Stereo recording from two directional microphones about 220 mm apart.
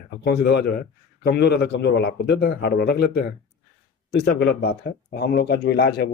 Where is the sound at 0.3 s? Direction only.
50° left (ahead or behind).